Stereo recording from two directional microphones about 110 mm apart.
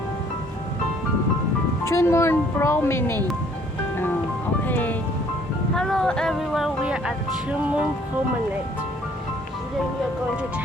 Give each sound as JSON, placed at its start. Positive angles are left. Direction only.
{"t": 1.8, "sound": "speech", "side_deg": 25}
{"t": 3.9, "sound": "music", "side_deg": 20}
{"t": 4.6, "sound": "speech", "side_deg": 15}
{"t": 5.7, "sound": "speech", "side_deg": 5}